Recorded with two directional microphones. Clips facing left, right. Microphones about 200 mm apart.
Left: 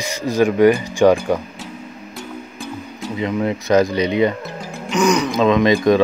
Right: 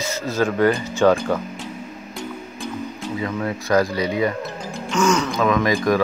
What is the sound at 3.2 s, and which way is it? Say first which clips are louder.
Speech: left 6 dB; 20° left (ahead or behind).